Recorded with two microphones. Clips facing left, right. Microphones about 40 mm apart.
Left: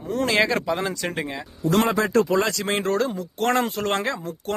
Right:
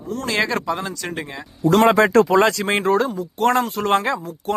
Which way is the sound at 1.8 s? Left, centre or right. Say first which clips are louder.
Right 6 dB; right.